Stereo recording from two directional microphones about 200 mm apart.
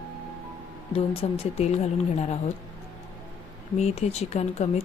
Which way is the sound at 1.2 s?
30° left (ahead or behind).